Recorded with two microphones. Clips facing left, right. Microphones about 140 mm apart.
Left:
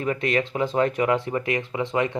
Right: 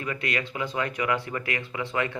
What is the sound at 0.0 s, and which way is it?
A man's voice, 25° left (ahead or behind).